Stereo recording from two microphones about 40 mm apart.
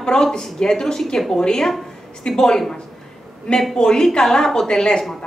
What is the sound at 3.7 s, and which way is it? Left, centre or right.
A woman's voice, centre.